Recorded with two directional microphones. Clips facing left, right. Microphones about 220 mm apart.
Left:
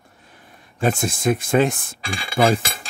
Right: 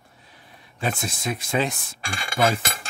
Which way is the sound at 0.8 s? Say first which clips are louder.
Left 8 dB; 50° left (ahead or behind).